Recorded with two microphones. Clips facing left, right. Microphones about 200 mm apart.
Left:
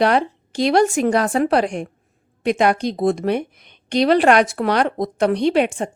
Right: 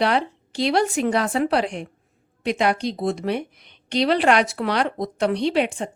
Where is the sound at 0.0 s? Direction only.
50° left (ahead or behind).